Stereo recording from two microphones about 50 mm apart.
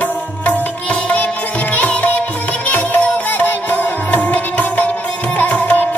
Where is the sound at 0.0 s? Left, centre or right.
Left.